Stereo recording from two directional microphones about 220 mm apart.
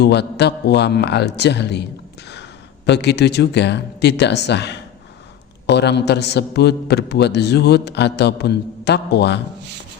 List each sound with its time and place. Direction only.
0.0 s a man's voice: 50° left (ahead or behind)